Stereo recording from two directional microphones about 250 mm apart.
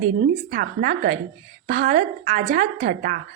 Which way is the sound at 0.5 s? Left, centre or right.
Right.